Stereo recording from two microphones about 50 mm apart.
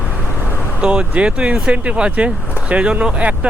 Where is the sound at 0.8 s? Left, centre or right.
Right.